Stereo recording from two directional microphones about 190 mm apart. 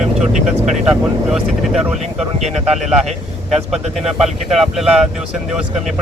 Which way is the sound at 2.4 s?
35° right (ahead or behind).